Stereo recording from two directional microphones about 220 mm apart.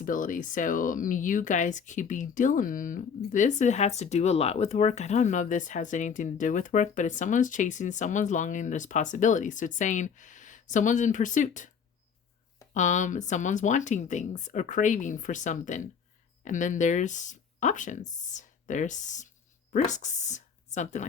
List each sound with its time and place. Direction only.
0.0 s speech: 40° left (ahead or behind)
12.7 s speech: 35° left (ahead or behind)